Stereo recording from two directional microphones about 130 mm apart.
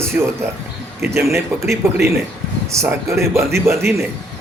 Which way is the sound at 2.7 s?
20° right (ahead or behind).